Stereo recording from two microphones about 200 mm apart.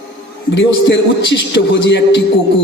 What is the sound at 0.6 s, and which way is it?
A man's voice, 60° left (ahead or behind).